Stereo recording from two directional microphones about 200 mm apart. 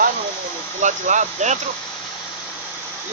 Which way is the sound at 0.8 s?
40° right (ahead or behind).